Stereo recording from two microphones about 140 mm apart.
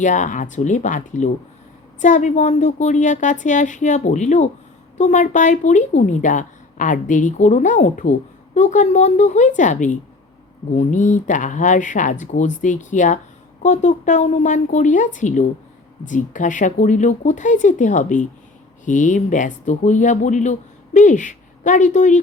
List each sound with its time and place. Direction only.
0.0 s speech: 60° left (ahead or behind)